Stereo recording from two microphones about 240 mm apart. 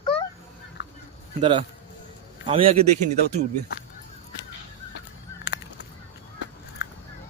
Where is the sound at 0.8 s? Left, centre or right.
Left.